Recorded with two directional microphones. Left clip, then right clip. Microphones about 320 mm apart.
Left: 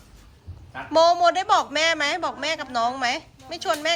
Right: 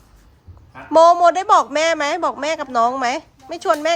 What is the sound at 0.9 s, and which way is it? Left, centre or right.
A man's voice, right.